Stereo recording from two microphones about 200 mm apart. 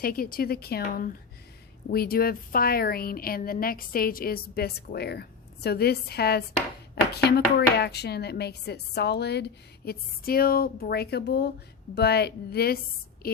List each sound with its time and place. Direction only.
0.0 s a woman's voice: 45° left (ahead or behind)